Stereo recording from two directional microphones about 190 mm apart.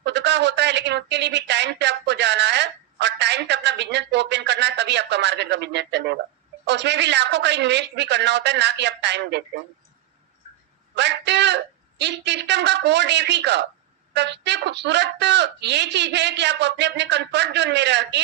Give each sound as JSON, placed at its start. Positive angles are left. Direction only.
{"t": 0.0, "sound": "speech", "side_deg": -65}
{"t": 10.9, "sound": "speech", "side_deg": -65}